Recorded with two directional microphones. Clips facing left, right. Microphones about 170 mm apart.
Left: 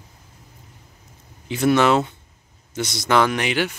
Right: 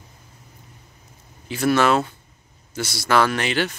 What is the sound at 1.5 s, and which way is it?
Speech, 20° left (ahead or behind).